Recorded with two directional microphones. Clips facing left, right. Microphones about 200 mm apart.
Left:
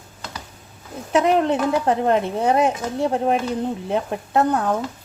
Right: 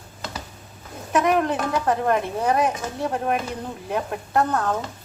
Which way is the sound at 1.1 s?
25° left (ahead or behind).